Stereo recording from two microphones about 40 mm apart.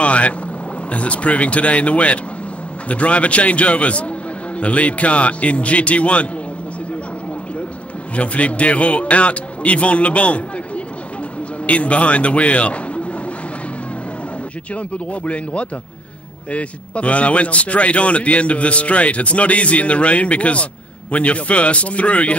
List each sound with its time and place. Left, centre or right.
0.0 s boat: left
0.9 s a man's voice: left
8.2 s a man's voice: left
11.6 s a man's voice: left
15.2 s a man's voice: left